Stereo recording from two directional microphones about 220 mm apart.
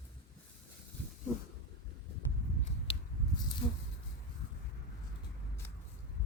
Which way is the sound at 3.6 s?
25° left (ahead or behind).